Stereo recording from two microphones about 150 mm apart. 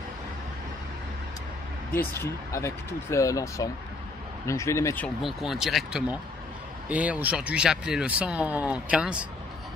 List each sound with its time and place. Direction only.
2.5 s speech: 20° left (ahead or behind)
5.0 s speech: centre (ahead or behind)